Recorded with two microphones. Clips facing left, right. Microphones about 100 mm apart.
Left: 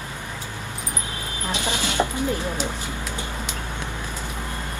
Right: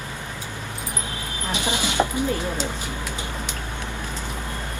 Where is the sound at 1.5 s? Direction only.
15° right (ahead or behind).